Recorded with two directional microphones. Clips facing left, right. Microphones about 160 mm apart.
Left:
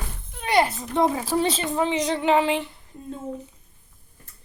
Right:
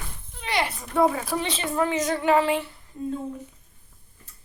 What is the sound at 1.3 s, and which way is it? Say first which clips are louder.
Speech: left 6 dB; 35° left (ahead or behind).